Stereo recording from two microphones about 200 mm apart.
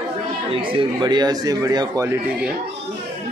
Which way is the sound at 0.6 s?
25° right (ahead or behind).